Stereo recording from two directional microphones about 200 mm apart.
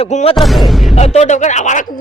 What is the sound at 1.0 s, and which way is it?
Speech, 35° left (ahead or behind).